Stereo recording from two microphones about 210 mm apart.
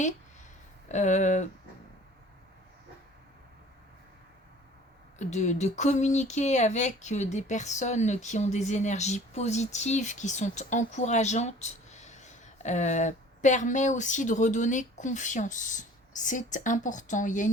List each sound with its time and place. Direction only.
0.9 s speech: 35° left (ahead or behind)
5.2 s speech: 35° left (ahead or behind)